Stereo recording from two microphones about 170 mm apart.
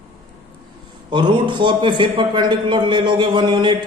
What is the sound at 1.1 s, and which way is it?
A man's voice, 25° right (ahead or behind).